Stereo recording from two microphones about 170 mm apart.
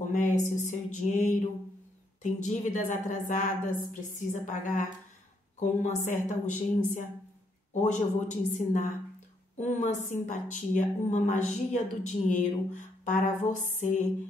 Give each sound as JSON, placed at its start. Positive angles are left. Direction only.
{"t": 0.0, "sound": "a woman's voice", "side_deg": 50}